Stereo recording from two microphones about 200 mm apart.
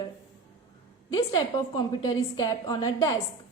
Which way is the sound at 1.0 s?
20° left (ahead or behind).